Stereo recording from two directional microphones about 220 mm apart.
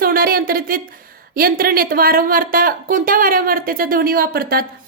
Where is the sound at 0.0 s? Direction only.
40° right (ahead or behind).